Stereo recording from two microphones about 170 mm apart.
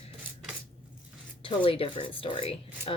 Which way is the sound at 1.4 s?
35° left (ahead or behind).